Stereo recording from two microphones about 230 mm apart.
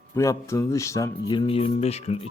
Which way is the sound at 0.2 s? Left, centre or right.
Centre.